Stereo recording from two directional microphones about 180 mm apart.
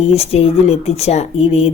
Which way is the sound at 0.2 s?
35° left (ahead or behind).